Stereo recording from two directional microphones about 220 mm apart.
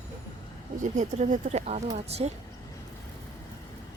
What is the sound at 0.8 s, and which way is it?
Speech, 35° right (ahead or behind).